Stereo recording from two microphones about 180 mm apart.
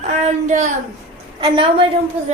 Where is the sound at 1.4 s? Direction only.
25° right (ahead or behind).